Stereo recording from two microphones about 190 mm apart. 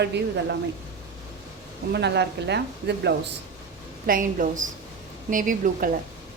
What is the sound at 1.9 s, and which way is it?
A woman's voice, 65° right (ahead or behind).